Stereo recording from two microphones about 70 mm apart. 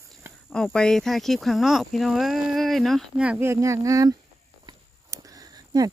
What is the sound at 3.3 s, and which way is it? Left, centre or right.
Speech, right.